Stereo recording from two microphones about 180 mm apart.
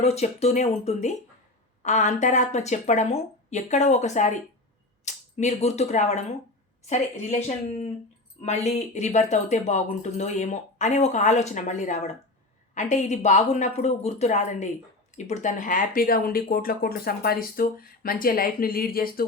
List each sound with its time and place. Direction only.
0.0 s speech: 40° left (ahead or behind); by 19.2 s 55° left (ahead or behind)